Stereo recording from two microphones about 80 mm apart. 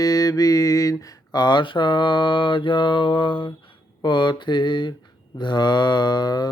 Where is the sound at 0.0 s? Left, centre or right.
Left.